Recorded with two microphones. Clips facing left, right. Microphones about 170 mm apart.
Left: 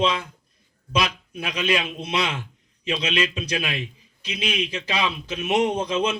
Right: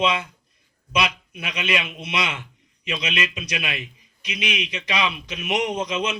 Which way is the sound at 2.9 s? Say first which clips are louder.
Left 3 dB; 30° left (ahead or behind).